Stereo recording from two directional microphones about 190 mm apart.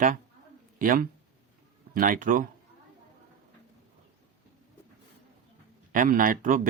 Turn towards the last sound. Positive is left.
turn(degrees=-45)  # may be behind; listen again after turning